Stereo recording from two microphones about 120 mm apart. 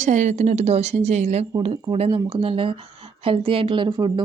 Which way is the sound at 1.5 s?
50° right (ahead or behind).